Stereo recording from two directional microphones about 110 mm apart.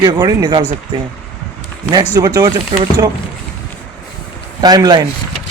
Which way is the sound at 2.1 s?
40° right (ahead or behind).